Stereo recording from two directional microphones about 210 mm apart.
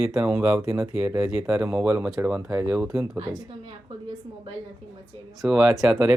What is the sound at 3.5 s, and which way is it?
A woman's voice, 25° right (ahead or behind).